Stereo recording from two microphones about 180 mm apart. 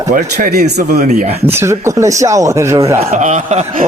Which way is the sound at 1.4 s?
15° right (ahead or behind).